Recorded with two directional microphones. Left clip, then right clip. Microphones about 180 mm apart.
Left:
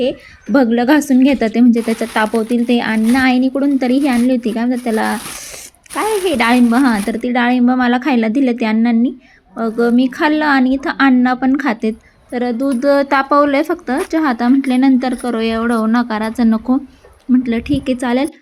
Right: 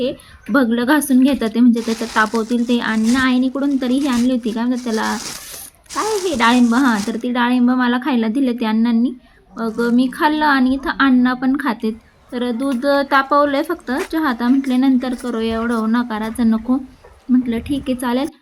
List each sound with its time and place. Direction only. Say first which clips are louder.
0.5 s a woman's voice: left 3 dB; 15° left (ahead or behind)